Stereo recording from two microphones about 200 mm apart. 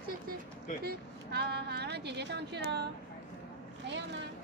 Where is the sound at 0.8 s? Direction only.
55° right (ahead or behind).